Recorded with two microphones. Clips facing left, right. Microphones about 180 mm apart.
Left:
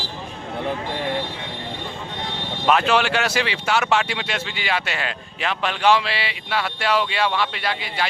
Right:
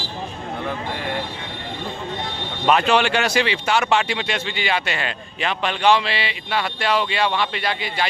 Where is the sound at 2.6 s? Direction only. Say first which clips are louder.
Right 1 dB; centre (ahead or behind).